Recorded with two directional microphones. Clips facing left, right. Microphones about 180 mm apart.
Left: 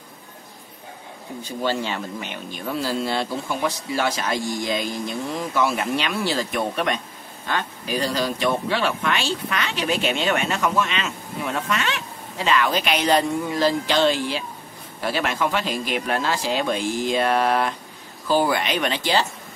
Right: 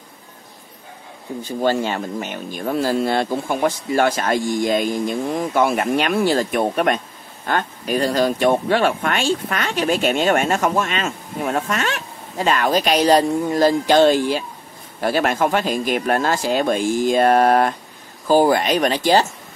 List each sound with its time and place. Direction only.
1.6 s speech: 45° right (ahead or behind)